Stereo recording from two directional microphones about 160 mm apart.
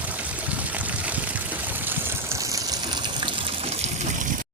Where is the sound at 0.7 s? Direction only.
10° right (ahead or behind); by 4.3 s 40° right (ahead or behind).